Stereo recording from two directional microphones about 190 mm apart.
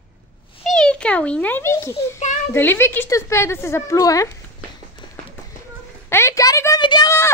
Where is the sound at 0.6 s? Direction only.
Centre (ahead or behind).